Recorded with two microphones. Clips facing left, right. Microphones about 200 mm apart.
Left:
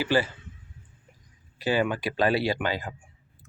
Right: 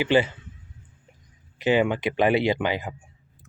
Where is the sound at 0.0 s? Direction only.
20° right (ahead or behind).